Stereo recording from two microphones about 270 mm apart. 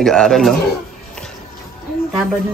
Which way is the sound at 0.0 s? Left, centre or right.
Centre.